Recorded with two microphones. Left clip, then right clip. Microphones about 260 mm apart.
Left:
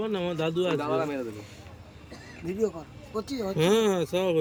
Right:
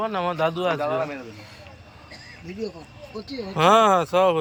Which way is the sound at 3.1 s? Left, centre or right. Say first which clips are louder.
Left 2 dB; left.